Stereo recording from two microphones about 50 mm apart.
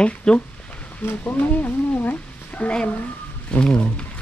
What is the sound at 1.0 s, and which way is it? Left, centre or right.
Speech, left.